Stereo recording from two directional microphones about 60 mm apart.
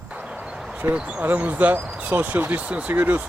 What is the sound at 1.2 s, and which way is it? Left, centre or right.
Speech, right.